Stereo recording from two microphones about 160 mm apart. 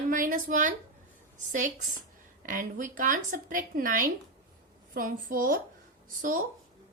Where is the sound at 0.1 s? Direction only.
55° right (ahead or behind).